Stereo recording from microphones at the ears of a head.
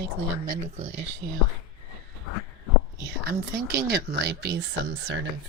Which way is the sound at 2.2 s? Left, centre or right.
Left.